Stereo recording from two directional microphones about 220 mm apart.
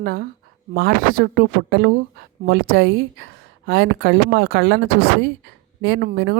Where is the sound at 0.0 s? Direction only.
45° right (ahead or behind).